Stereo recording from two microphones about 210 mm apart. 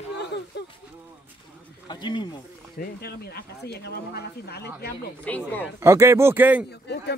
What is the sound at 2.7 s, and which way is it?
Speech, 50° left (ahead or behind).